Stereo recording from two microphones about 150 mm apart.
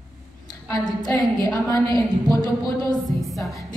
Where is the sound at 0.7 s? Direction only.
25° left (ahead or behind).